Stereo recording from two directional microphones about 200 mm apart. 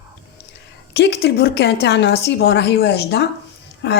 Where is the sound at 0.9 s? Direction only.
55° left (ahead or behind).